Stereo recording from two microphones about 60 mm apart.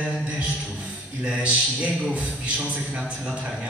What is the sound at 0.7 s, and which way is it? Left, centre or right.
A man's voice, centre.